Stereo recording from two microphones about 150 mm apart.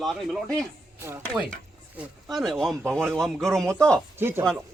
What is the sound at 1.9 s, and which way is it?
Speech, centre (ahead or behind).